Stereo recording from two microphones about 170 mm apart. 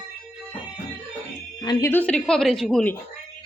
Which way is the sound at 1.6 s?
25° left (ahead or behind).